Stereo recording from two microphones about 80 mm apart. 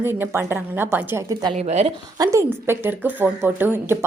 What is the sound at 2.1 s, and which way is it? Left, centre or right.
Speech, right.